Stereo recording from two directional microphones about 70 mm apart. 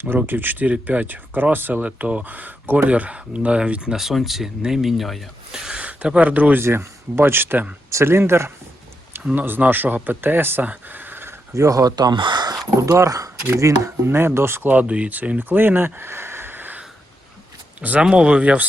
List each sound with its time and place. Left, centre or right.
0.0 s speech: right; by 5.5 s centre
5.6 s speech: centre
6.6 s speech: right
11.5 s speech: right
12.8 s speech: right
14.7 s speech: centre